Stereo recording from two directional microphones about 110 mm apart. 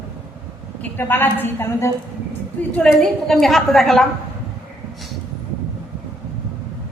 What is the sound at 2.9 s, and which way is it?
A woman's voice, 5° left (ahead or behind).